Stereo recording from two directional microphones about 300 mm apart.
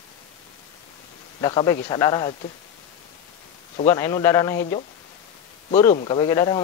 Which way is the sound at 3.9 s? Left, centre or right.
Centre.